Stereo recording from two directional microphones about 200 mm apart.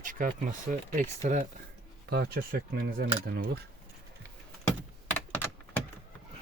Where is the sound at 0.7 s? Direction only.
40° right (ahead or behind).